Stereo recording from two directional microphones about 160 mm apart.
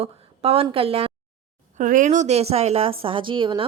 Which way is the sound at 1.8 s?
55° right (ahead or behind).